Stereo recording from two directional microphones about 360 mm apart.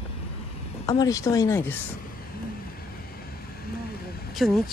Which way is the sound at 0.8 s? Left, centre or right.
Centre.